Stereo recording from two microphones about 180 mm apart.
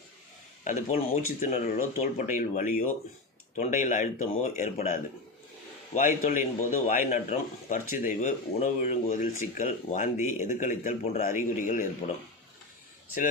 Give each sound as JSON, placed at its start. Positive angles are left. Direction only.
{"t": 0.6, "sound": "a man's voice", "side_deg": 45}